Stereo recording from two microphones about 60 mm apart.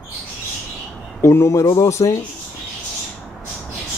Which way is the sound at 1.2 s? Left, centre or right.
Left.